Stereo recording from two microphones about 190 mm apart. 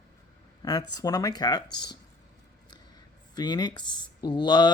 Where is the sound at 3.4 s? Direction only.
20° left (ahead or behind).